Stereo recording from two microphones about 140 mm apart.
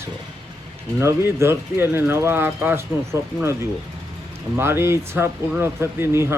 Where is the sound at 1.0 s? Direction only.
20° right (ahead or behind).